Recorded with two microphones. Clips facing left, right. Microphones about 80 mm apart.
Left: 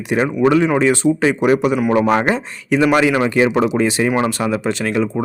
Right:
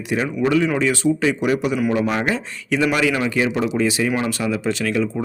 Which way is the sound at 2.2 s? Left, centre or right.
Left.